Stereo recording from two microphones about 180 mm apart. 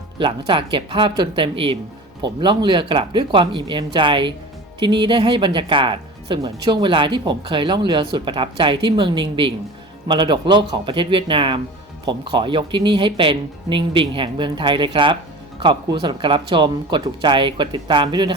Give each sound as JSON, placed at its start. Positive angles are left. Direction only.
{"t": 0.2, "sound": "speech", "side_deg": -30}